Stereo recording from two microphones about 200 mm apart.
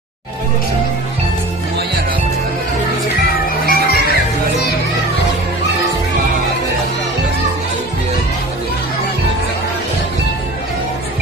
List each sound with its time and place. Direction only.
3.6 s children playing: 50° left (ahead or behind)